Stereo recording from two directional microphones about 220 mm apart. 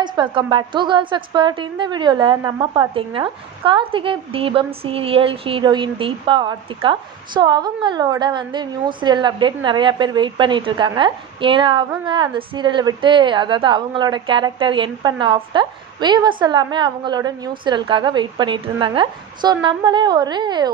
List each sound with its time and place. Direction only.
0.0 s a woman's voice: 20° right (ahead or behind)